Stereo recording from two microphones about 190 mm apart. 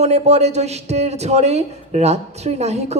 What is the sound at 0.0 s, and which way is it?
A man's voice, 35° right (ahead or behind).